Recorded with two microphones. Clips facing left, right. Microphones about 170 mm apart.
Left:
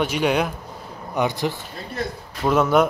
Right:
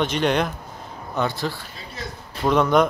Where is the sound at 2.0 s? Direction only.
55° left (ahead or behind).